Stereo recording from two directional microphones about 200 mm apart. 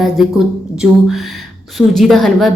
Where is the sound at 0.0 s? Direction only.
Centre (ahead or behind).